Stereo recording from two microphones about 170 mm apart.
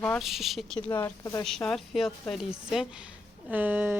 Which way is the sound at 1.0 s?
15° left (ahead or behind).